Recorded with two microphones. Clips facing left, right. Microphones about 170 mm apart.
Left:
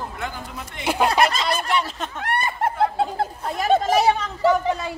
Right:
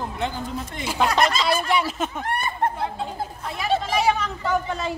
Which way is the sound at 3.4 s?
45° left (ahead or behind).